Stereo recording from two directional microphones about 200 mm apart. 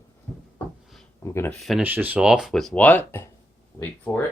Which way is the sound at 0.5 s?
Centre (ahead or behind).